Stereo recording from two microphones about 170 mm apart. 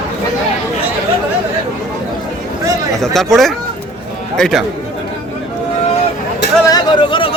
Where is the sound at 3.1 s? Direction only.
Centre (ahead or behind).